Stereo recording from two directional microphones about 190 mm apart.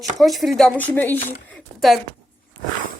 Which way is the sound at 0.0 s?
Centre (ahead or behind).